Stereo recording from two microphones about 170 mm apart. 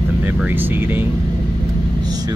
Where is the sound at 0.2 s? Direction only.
10° right (ahead or behind).